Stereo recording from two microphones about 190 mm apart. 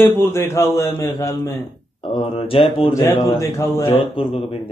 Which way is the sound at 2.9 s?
15° left (ahead or behind).